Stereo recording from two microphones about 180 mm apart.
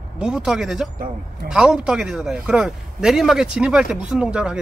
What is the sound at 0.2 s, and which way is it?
A man's voice, 5° right (ahead or behind).